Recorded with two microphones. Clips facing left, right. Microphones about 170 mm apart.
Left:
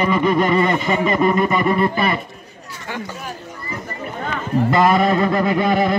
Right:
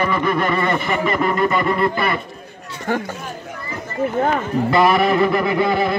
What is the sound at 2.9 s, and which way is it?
Speech, 50° right (ahead or behind).